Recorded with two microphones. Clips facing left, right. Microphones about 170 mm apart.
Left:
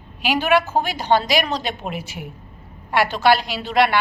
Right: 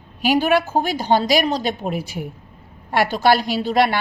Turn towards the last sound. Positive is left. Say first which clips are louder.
# right 1 dB
turn(degrees=-45)  # may be behind; listen again after turning